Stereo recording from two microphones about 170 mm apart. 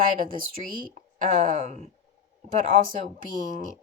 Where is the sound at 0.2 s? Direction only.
55° right (ahead or behind).